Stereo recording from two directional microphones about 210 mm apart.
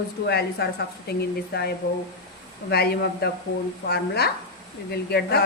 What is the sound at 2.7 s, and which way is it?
A woman's voice, 50° left (ahead or behind).